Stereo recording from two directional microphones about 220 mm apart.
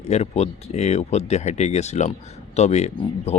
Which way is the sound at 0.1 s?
30° left (ahead or behind).